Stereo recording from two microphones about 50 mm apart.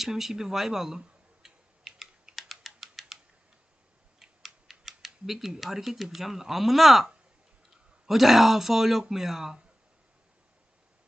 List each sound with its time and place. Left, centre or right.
0.0 s speech: centre
1.4 s typing: centre
4.2 s speech: centre